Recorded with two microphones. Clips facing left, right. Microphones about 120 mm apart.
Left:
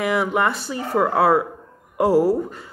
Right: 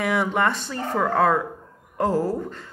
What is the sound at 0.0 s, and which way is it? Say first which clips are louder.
A woman's voice: left 2 dB; centre (ahead or behind).